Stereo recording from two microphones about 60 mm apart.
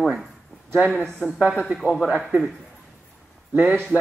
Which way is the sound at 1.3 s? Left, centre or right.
Right.